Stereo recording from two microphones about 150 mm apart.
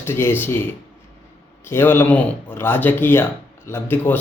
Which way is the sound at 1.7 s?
15° left (ahead or behind).